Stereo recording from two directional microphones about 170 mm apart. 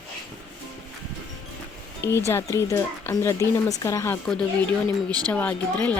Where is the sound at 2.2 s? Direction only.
15° left (ahead or behind).